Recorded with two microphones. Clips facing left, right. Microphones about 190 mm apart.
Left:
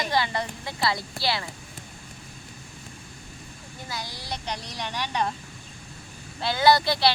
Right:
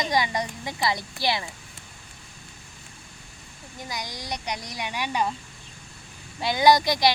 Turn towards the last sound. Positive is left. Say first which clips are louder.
# right 1 dB
turn(degrees=-15)  # may be behind; listen again after turning